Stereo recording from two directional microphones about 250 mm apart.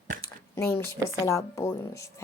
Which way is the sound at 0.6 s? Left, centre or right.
Centre.